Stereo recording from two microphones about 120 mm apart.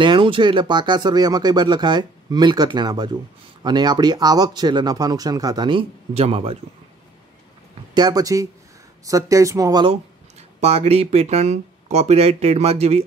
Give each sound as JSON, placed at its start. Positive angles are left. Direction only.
{"t": 0.0, "sound": "speech", "side_deg": -45}
{"t": 6.1, "sound": "a man's voice", "side_deg": -55}
{"t": 7.9, "sound": "speech", "side_deg": -35}
{"t": 10.6, "sound": "speech", "side_deg": -60}